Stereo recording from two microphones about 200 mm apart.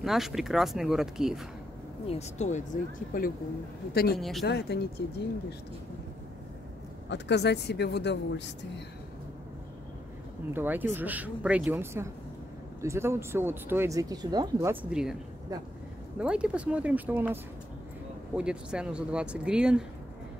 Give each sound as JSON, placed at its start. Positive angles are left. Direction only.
{"t": 0.0, "sound": "speech", "side_deg": 0}
{"t": 2.0, "sound": "speech", "side_deg": 35}
{"t": 4.2, "sound": "speech", "side_deg": 0}
{"t": 4.5, "sound": "speech", "side_deg": 55}
{"t": 7.1, "sound": "speech", "side_deg": 60}
{"t": 10.5, "sound": "speech", "side_deg": -10}
{"t": 16.2, "sound": "speech", "side_deg": -5}